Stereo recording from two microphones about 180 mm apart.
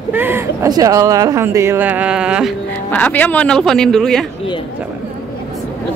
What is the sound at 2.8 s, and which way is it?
Speech, 10° left (ahead or behind).